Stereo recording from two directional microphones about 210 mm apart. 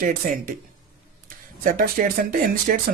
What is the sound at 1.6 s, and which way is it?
Speech, 40° right (ahead or behind).